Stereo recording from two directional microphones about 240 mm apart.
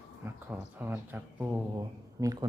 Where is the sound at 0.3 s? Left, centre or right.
Centre.